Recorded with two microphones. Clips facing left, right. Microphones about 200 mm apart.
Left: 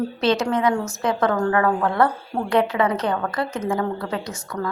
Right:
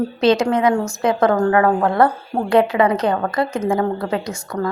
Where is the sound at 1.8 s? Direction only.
40° right (ahead or behind).